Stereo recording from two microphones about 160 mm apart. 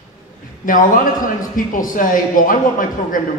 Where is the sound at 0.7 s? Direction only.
55° left (ahead or behind).